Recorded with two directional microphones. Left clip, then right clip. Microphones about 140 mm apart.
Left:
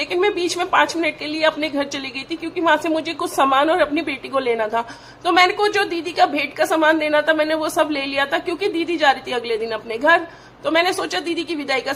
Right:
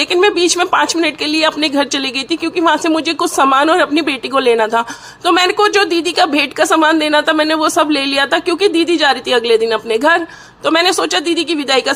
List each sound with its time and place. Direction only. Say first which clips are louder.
0.0 s speech: right 8 dB; 25° right (ahead or behind)